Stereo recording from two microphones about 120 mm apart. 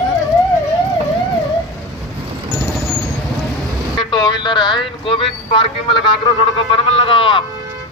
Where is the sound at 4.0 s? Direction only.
40° left (ahead or behind).